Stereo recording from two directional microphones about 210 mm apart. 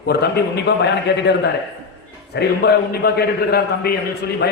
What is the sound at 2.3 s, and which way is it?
A man's voice, 50° left (ahead or behind).